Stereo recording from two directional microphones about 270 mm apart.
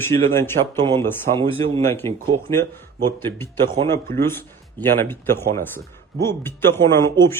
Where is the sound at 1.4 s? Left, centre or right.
Centre.